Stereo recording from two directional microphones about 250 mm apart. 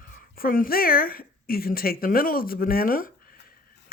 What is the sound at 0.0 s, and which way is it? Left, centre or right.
Speech, left.